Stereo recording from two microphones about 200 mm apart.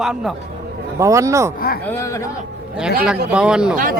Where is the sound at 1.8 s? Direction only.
15° left (ahead or behind).